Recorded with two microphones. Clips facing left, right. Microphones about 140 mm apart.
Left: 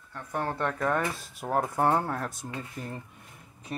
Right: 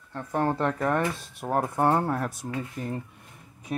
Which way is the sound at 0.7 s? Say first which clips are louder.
Right 2 dB; 5° right (ahead or behind).